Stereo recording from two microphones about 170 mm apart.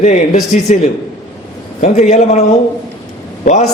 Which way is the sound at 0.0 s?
45° left (ahead or behind).